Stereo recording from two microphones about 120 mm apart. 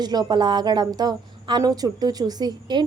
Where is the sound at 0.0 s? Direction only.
35° right (ahead or behind).